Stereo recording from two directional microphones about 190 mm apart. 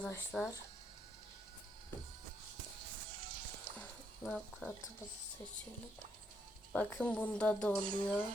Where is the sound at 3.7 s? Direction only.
50° right (ahead or behind).